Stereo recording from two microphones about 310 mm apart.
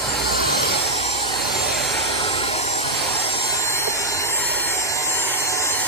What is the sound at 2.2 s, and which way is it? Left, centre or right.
Vehicle, centre.